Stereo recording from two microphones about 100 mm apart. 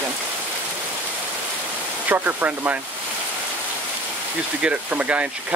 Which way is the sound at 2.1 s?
15° right (ahead or behind).